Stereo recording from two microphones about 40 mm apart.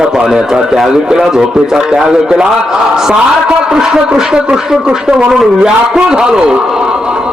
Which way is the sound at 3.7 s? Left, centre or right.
Centre.